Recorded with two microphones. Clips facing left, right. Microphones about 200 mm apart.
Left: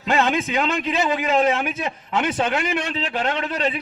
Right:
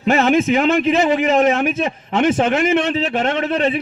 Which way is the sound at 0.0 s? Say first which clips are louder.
Right 6 dB; 25° right (ahead or behind).